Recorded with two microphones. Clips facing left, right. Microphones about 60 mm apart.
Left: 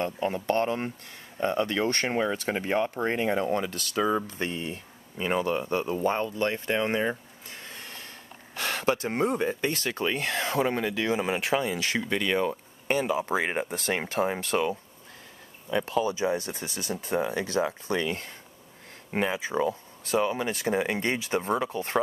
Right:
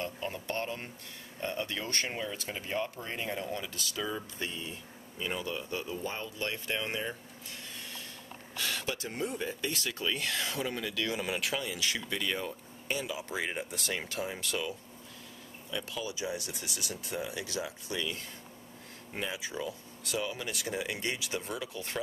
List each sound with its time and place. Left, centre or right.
0.0 s speech: left